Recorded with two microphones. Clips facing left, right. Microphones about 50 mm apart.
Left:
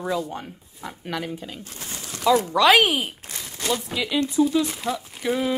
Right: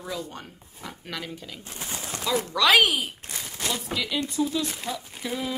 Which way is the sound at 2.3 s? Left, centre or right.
Centre.